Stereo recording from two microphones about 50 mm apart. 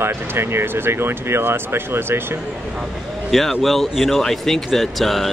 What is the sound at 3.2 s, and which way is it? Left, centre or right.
A man's voice, centre.